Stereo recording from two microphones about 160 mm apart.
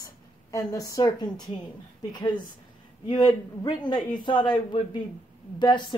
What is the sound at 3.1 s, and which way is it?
A woman's voice, 25° left (ahead or behind).